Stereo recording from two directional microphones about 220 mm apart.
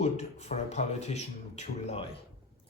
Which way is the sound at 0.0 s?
30° left (ahead or behind).